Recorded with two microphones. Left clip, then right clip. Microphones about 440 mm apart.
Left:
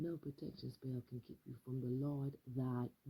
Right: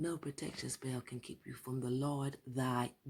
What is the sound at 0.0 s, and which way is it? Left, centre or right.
Speech, right.